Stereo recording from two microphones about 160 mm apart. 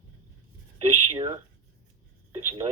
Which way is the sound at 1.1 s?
25° right (ahead or behind).